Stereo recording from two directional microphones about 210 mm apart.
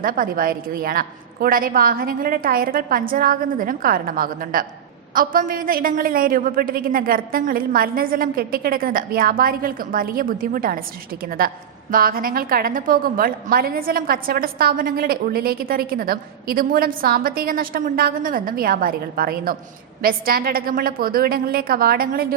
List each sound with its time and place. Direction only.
0.0 s a woman's voice: 40° right (ahead or behind)